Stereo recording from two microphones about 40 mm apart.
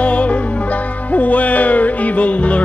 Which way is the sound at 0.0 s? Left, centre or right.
Left.